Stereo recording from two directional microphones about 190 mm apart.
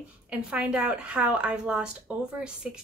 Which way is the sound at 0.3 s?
5° right (ahead or behind).